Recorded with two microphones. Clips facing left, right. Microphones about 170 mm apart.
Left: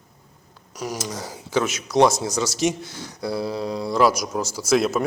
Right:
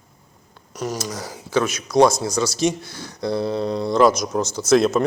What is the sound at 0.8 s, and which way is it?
Speech, 15° left (ahead or behind).